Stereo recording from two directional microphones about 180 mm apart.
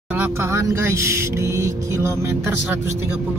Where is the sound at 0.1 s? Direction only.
15° right (ahead or behind).